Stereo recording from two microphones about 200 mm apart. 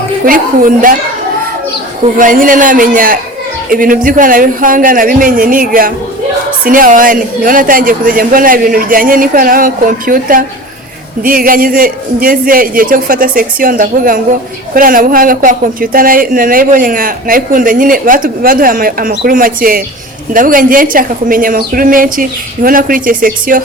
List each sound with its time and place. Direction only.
0.3 s speech: 45° right (ahead or behind)
2.1 s speech: 40° right (ahead or behind)